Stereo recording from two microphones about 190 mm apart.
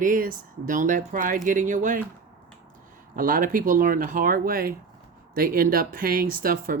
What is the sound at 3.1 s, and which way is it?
Speech, 45° right (ahead or behind).